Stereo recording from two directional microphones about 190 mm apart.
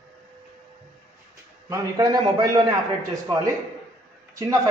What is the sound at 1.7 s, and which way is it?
Speech, 20° right (ahead or behind).